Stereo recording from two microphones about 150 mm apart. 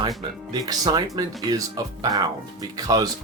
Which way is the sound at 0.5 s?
25° right (ahead or behind).